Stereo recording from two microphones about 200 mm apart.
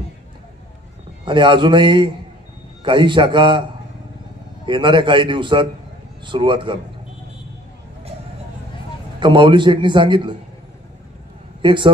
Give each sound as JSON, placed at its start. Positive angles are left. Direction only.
{"t": 1.2, "sound": "a man's voice", "side_deg": -25}
{"t": 4.6, "sound": "a man's voice", "side_deg": -25}
{"t": 9.2, "sound": "a man's voice", "side_deg": -25}
{"t": 11.6, "sound": "a man's voice", "side_deg": -25}